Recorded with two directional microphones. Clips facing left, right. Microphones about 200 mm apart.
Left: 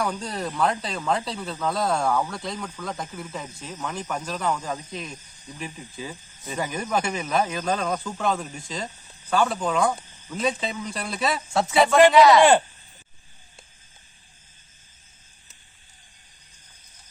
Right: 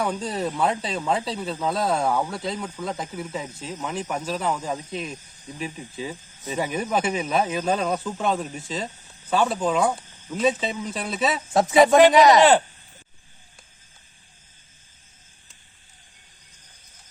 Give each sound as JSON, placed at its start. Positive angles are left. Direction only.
{"t": 0.2, "sound": "speech", "side_deg": 0}
{"t": 2.0, "sound": "speech", "side_deg": -20}
{"t": 2.3, "sound": "speech", "side_deg": -5}
{"t": 2.6, "sound": "speech", "side_deg": -20}
{"t": 2.9, "sound": "speech", "side_deg": 0}
{"t": 11.5, "sound": "speech", "side_deg": -15}